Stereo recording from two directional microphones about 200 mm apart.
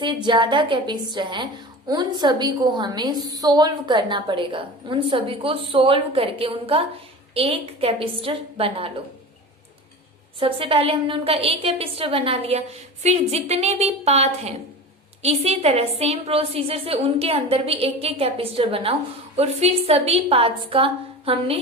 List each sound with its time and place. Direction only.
0.0 s a woman's voice: 20° right (ahead or behind)
10.4 s a woman's voice: 25° right (ahead or behind)